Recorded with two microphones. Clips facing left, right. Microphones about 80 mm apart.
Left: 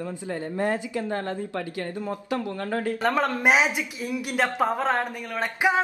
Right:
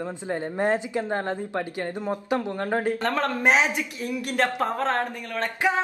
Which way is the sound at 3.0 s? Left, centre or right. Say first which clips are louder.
Left 1 dB; centre.